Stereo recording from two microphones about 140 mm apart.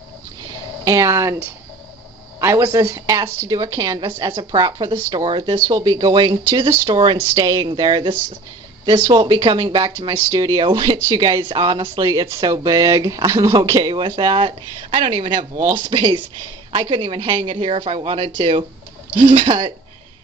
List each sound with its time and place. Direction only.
0.8 s speech: 20° right (ahead or behind)
7.6 s speech: 35° right (ahead or behind)
12.0 s speech: 25° right (ahead or behind)